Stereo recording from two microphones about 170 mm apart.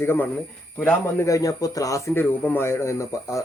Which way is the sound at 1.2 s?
20° left (ahead or behind).